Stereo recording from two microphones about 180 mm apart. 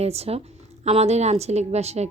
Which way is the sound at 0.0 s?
35° right (ahead or behind).